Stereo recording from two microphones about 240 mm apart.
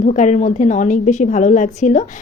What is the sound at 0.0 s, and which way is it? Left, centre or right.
A woman's voice, left.